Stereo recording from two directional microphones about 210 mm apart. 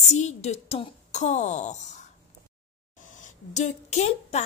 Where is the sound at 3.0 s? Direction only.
35° left (ahead or behind).